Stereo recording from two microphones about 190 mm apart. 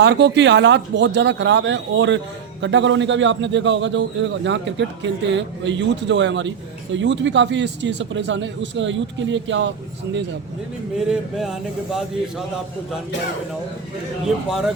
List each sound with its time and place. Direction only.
0.0 s speech: 65° right (ahead or behind)
10.9 s speech: 5° right (ahead or behind)
14.3 s speech: 5° right (ahead or behind)